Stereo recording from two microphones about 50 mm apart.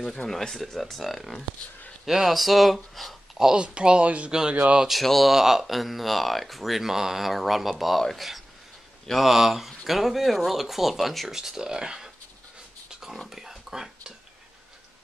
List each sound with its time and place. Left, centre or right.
0.0 s speech: centre
3.3 s speech: centre
4.3 s speech: centre
4.8 s speech: centre
13.3 s a sound: centre